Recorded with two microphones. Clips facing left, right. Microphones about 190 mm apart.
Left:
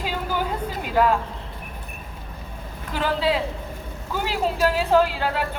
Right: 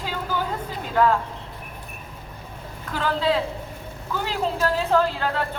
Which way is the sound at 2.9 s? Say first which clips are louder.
Even; 15° left (ahead or behind).